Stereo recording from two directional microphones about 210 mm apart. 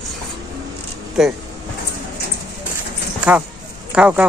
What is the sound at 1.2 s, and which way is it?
Speech, centre (ahead or behind).